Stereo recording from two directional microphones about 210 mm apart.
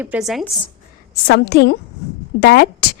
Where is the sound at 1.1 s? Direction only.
55° left (ahead or behind).